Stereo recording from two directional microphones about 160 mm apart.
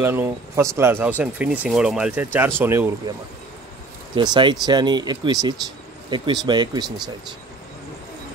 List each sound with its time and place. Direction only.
0.0 s speech: 15° right (ahead or behind)
4.1 s speech: 30° right (ahead or behind)